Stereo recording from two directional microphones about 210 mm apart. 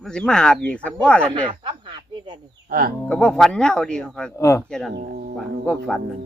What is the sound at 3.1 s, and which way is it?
Speech, 5° left (ahead or behind).